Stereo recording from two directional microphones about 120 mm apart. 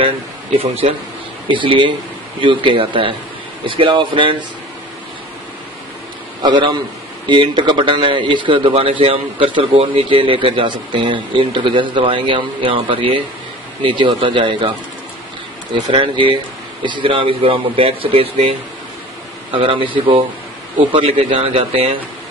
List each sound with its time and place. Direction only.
1.5 s a man's voice: 45° right (ahead or behind)
6.4 s a man's voice: 40° right (ahead or behind)
15.7 s a man's voice: 45° right (ahead or behind)
19.5 s a man's voice: 45° right (ahead or behind)